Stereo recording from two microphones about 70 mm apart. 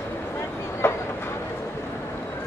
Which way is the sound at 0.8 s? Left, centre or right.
Left.